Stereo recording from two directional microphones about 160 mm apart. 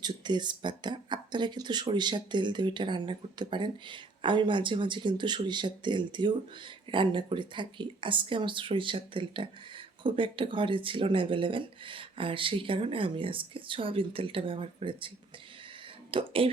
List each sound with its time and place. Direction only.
0.0 s speech: 30° right (ahead or behind)
16.1 s speech: 35° right (ahead or behind)